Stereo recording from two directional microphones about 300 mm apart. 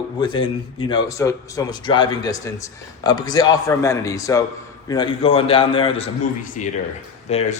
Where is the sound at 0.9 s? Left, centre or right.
Centre.